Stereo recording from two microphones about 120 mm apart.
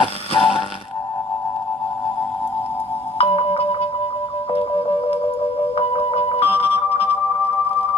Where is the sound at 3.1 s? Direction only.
50° left (ahead or behind).